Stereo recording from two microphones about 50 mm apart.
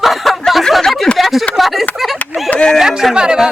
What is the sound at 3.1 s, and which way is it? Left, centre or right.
Speech, centre.